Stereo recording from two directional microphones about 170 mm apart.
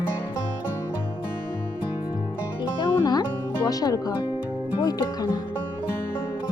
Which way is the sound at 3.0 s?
20° left (ahead or behind).